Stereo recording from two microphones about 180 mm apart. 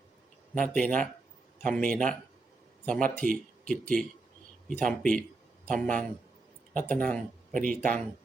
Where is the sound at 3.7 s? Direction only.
5° left (ahead or behind).